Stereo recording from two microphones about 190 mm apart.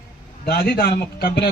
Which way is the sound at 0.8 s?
55° left (ahead or behind).